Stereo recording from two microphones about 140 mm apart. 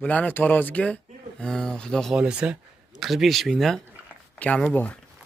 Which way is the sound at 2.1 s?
5° right (ahead or behind).